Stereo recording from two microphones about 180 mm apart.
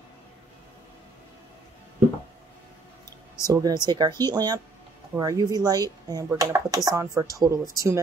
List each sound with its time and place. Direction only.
3.4 s speech: 20° right (ahead or behind)